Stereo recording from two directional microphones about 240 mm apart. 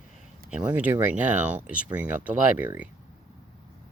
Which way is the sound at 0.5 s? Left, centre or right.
Centre.